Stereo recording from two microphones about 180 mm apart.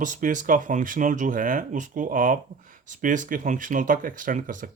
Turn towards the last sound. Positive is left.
turn(degrees=-45)  # may be behind; listen again after turning